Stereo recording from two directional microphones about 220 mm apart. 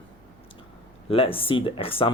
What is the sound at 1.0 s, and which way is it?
Speech, 25° left (ahead or behind).